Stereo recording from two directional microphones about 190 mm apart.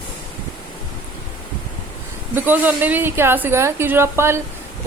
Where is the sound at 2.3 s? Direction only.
10° right (ahead or behind).